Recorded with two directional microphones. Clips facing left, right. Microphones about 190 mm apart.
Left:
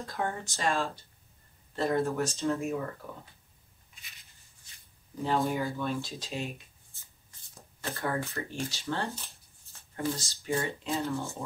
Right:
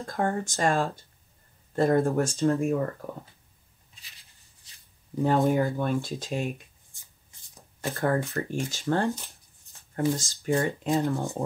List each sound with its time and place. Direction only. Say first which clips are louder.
0.0 s speech: right 6 dB; 50° right (ahead or behind)
5.2 s speech: right 6 dB; 50° right (ahead or behind)
6.9 s shuffling cards: right 1 dB; 15° right (ahead or behind)
8.0 s speech: right 7 dB; 50° right (ahead or behind)
9.1 s a sound: right 8 dB; 15° right (ahead or behind)
9.9 s speech: right 6 dB; 50° right (ahead or behind)